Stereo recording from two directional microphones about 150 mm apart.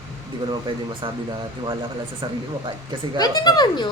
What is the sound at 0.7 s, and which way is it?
Speech, 30° right (ahead or behind).